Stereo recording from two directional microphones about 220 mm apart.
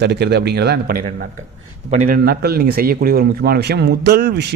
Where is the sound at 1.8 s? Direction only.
35° right (ahead or behind).